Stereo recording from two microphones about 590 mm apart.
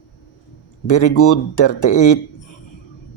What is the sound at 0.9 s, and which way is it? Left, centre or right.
Speech, left.